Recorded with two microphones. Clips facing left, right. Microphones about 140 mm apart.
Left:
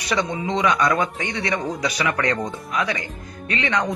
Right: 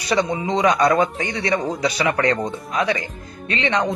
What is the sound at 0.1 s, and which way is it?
Speech, 35° right (ahead or behind).